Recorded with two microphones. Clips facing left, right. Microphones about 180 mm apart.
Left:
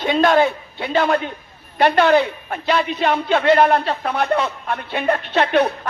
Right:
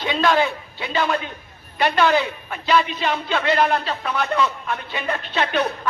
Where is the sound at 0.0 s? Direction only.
50° left (ahead or behind).